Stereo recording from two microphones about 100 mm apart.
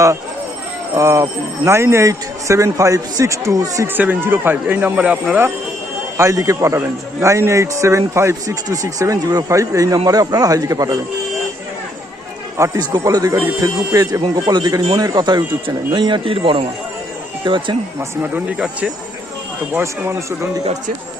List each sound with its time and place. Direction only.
0.9 s a man's voice: 30° right (ahead or behind)
3.8 s speech: 20° right (ahead or behind)
6.1 s a man's voice: 35° right (ahead or behind)
12.5 s speech: 30° right (ahead or behind)
12.8 s a man's voice: 40° right (ahead or behind)
14.2 s speech: 50° right (ahead or behind)
18.2 s speech: 10° right (ahead or behind)
19.7 s speech: 30° right (ahead or behind)